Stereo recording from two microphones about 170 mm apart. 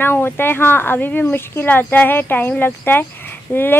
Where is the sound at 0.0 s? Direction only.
10° left (ahead or behind).